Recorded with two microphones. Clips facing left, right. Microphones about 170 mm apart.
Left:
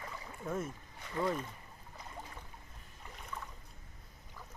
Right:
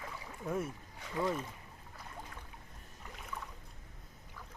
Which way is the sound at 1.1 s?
5° right (ahead or behind).